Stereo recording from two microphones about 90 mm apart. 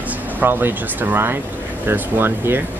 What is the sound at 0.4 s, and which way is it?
Speech, 25° right (ahead or behind).